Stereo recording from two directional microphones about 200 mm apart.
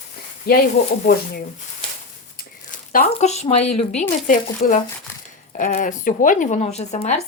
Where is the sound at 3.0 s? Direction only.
35° left (ahead or behind).